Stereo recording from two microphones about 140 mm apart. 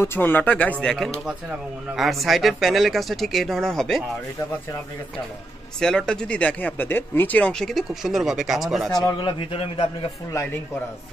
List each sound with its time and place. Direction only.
0.0 s speech: 15° left (ahead or behind)
5.8 s speech: 5° left (ahead or behind)
8.9 s a man's voice: 30° left (ahead or behind)